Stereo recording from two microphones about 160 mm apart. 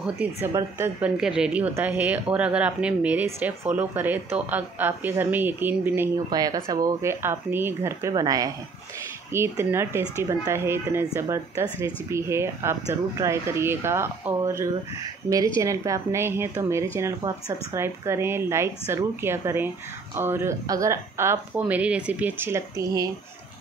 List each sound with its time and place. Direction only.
0.0 s a woman's voice: 10° right (ahead or behind)
1.1 s a woman's voice: 5° right (ahead or behind)
6.3 s a woman's voice: 25° right (ahead or behind)